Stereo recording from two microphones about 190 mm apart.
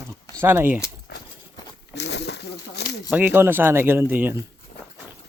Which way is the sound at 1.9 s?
65° left (ahead or behind).